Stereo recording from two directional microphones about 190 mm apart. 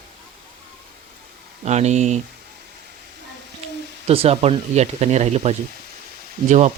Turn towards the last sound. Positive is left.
turn(degrees=-40)  # may be behind; listen again after turning